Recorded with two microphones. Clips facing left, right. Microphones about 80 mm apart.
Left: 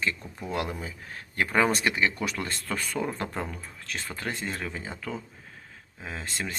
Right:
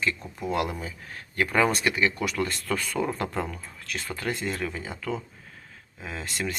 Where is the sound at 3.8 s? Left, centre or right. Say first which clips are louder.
Right 3 dB; left.